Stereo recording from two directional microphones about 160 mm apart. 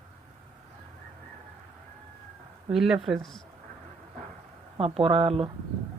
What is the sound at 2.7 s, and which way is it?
Speech, 5° right (ahead or behind).